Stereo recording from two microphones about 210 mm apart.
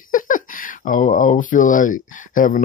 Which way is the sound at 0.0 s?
40° left (ahead or behind).